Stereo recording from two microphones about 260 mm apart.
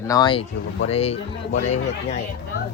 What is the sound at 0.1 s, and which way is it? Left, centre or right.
Speech, centre.